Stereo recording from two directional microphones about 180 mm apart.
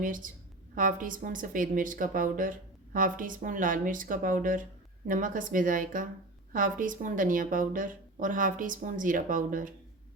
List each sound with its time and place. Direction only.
0.0 s speech: 50° right (ahead or behind)